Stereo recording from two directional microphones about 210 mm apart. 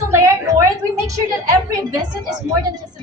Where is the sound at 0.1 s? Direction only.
15° right (ahead or behind).